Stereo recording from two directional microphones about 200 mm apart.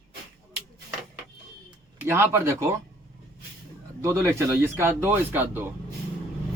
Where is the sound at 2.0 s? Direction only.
10° right (ahead or behind).